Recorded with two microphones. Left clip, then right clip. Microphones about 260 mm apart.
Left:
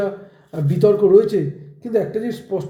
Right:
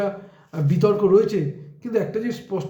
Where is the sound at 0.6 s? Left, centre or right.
Centre.